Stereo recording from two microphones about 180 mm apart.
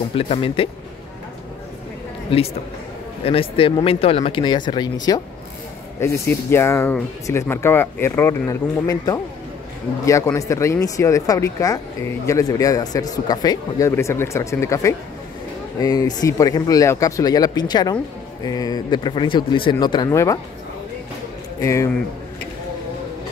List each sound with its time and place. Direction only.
0.1 s speech: 30° left (ahead or behind)
2.3 s speech: 30° left (ahead or behind)
21.5 s speech: 15° left (ahead or behind)